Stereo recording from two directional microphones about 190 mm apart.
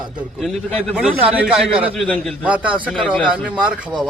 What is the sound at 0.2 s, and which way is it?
A man's voice, centre (ahead or behind).